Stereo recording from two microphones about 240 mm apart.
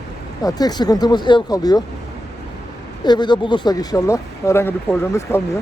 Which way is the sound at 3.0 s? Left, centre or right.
Centre.